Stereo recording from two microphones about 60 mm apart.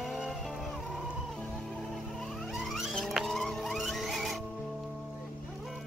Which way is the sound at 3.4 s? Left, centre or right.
Centre.